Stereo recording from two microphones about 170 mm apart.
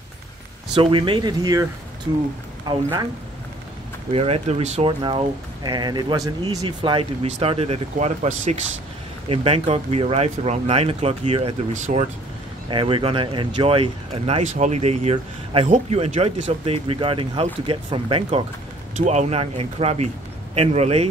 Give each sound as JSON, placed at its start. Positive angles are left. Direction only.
{"t": 0.7, "sound": "speech", "side_deg": -30}
{"t": 4.1, "sound": "speech", "side_deg": -35}
{"t": 12.6, "sound": "speech", "side_deg": -30}